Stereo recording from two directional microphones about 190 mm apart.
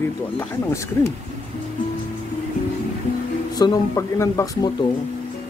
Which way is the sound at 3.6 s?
20° left (ahead or behind).